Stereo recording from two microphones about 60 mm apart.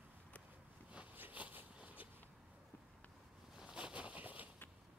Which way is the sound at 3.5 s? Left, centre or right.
Centre.